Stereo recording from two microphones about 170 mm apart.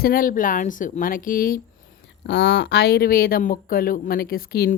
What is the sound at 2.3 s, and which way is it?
Speech, 90° left.